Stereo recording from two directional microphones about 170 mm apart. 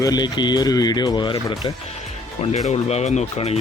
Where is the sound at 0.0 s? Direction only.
25° left (ahead or behind).